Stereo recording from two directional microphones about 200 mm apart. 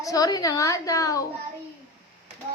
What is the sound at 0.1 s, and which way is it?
Speech, 20° left (ahead or behind).